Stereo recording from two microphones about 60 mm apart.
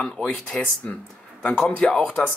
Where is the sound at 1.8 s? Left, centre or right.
Centre.